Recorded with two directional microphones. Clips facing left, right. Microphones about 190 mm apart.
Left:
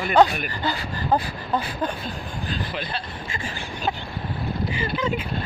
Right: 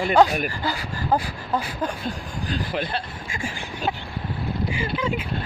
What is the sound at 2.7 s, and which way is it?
Speech, 50° right (ahead or behind).